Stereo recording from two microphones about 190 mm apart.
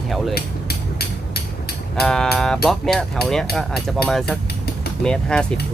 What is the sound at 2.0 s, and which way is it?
Speech, 5° left (ahead or behind).